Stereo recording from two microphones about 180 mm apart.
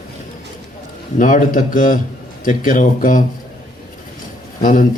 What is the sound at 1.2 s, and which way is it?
A man's voice, 45° left (ahead or behind).